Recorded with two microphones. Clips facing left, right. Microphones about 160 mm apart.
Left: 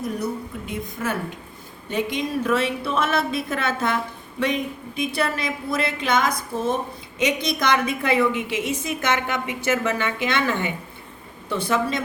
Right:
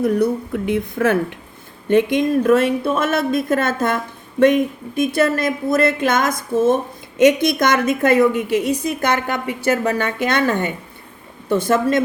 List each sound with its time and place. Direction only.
0.0 s a woman's voice: 65° right (ahead or behind)
1.9 s a woman's voice: 55° right (ahead or behind)